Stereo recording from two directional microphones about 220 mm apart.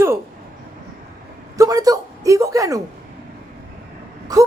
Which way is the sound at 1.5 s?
15° right (ahead or behind).